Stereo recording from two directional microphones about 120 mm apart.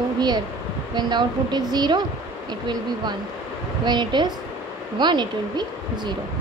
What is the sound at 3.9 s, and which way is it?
A woman's voice, 40° right (ahead or behind).